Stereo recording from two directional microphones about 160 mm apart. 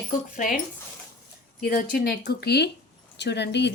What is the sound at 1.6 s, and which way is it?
A woman's voice, 65° left (ahead or behind).